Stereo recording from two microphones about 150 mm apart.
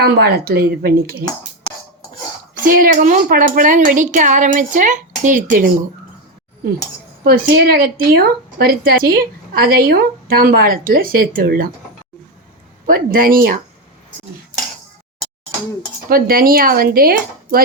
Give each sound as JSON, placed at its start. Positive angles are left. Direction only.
{"t": 0.0, "sound": "speech", "side_deg": -90}
{"t": 2.6, "sound": "a woman's voice", "side_deg": -70}
{"t": 7.3, "sound": "a woman's voice", "side_deg": -90}
{"t": 12.8, "sound": "speech", "side_deg": -70}
{"t": 16.0, "sound": "speech", "side_deg": -80}